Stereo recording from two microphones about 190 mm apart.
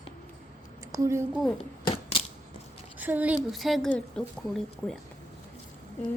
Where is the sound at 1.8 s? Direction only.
30° left (ahead or behind).